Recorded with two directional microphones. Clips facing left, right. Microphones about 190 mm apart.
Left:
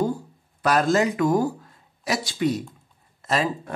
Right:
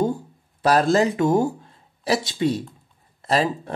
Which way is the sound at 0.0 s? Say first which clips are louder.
Right 2 dB; 25° right (ahead or behind).